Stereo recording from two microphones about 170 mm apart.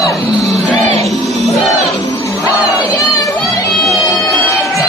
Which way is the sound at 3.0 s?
20° left (ahead or behind).